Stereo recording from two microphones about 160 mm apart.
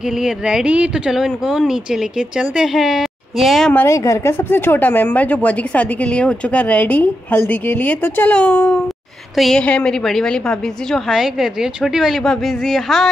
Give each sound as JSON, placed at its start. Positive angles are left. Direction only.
{"t": 0.0, "sound": "speech", "side_deg": -5}
{"t": 3.8, "sound": "a woman's voice", "side_deg": 20}